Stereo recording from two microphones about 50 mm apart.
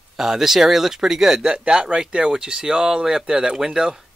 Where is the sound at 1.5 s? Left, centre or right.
Right.